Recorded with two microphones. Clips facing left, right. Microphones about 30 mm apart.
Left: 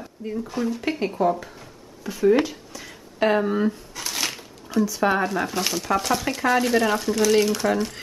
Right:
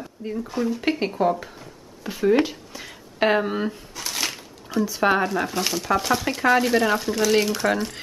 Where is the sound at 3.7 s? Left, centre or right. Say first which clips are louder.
Left 3 dB; centre.